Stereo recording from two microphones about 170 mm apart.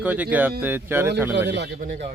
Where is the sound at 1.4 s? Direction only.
85° right.